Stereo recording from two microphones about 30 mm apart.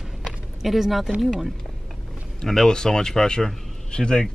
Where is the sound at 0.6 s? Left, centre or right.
Centre.